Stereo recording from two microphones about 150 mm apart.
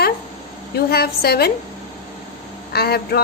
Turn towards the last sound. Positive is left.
turn(degrees=90)